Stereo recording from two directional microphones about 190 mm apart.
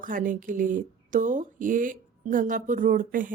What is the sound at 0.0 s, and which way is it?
Speech, 45° right (ahead or behind).